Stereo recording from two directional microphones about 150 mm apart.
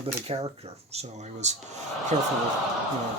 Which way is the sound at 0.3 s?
40° right (ahead or behind).